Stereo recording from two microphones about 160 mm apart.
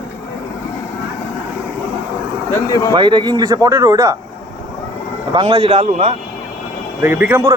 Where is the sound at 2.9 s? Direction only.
30° right (ahead or behind).